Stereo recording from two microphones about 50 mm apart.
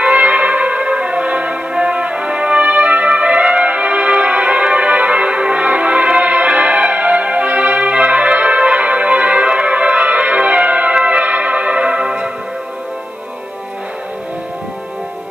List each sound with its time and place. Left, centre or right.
0.0 s music: right